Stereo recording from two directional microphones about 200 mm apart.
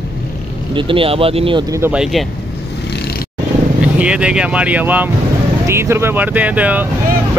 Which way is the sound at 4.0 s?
5° right (ahead or behind).